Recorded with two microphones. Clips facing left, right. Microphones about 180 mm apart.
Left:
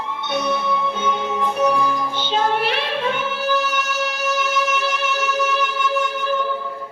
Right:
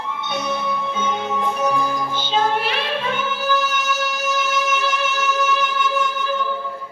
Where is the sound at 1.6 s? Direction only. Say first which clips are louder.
Left 4 dB; 65° left (ahead or behind).